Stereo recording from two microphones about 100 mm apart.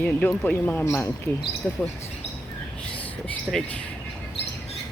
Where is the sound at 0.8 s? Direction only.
30° left (ahead or behind).